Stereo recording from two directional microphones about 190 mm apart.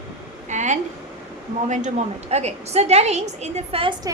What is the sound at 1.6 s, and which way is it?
A woman's voice, 40° right (ahead or behind).